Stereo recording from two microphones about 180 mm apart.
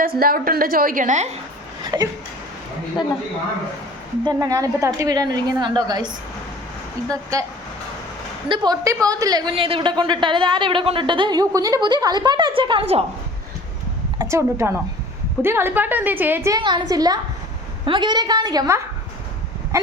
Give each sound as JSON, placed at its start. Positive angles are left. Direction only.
{"t": 0.0, "sound": "a woman's voice", "side_deg": -55}
{"t": 1.8, "sound": "a sound", "side_deg": -20}
{"t": 4.2, "sound": "a woman's voice", "side_deg": -20}
{"t": 7.1, "sound": "a woman's voice", "side_deg": -20}
{"t": 8.4, "sound": "a woman's voice", "side_deg": -25}
{"t": 14.2, "sound": "a woman's voice", "side_deg": -15}
{"t": 16.6, "sound": "a woman's voice", "side_deg": -25}
{"t": 19.7, "sound": "a sound", "side_deg": -15}